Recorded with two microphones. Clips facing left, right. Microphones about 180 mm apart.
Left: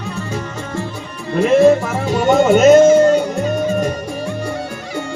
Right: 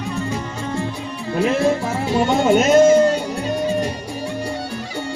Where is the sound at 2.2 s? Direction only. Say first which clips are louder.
Left 7 dB; 45° left (ahead or behind).